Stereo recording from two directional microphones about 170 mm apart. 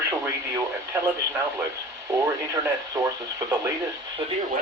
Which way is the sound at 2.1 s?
20° right (ahead or behind).